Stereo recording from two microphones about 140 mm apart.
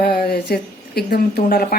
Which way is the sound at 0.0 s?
90° left.